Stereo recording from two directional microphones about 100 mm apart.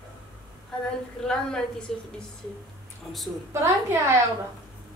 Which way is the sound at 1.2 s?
5° left (ahead or behind).